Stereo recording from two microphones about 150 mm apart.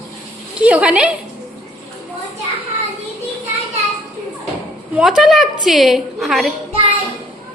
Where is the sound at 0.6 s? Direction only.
10° right (ahead or behind).